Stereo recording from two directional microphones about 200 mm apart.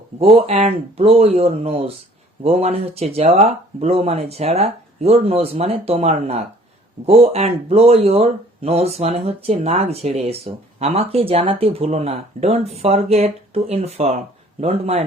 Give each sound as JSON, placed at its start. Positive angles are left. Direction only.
{"t": 0.2, "sound": "speech", "side_deg": -30}